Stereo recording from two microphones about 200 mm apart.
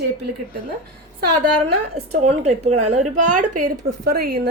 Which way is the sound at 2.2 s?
35° right (ahead or behind).